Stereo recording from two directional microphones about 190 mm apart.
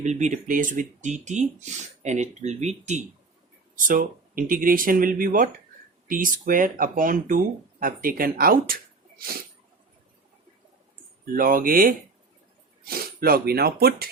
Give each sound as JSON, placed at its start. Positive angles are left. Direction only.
{"t": 0.0, "sound": "speech", "side_deg": -40}
{"t": 11.3, "sound": "speech", "side_deg": -50}